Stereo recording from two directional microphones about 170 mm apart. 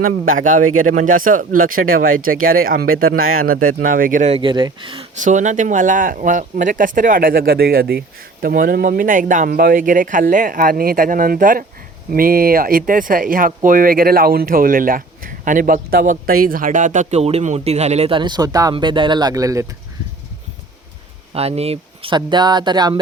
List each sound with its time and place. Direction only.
0.0 s speech: 55° right (ahead or behind)
4.4 s speech: 30° right (ahead or behind)
5.2 s speech: 45° right (ahead or behind); by 19.6 s 20° right (ahead or behind)
21.3 s speech: 35° right (ahead or behind)